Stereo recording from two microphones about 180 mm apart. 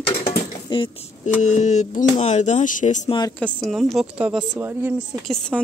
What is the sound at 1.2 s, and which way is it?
Speech, 40° left (ahead or behind).